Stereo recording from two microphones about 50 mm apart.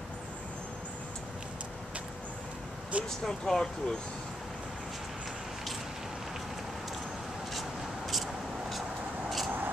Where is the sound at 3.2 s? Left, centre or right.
Centre.